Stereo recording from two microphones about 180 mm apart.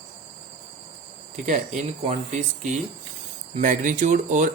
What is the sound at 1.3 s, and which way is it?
Speech, 45° right (ahead or behind).